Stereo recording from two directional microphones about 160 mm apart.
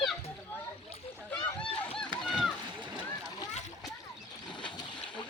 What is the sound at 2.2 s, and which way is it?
Splash, 5° left (ahead or behind).